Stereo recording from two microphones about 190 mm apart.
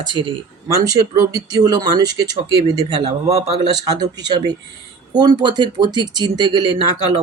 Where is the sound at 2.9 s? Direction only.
30° right (ahead or behind).